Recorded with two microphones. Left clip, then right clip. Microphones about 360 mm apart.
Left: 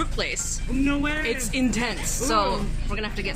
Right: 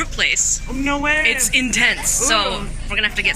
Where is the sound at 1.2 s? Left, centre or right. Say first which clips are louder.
Right 9 dB; centre.